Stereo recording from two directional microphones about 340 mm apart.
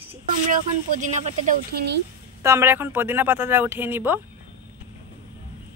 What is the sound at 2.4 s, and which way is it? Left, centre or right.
Speech, centre.